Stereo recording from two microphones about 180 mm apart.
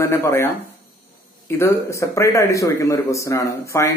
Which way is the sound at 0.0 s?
15° left (ahead or behind).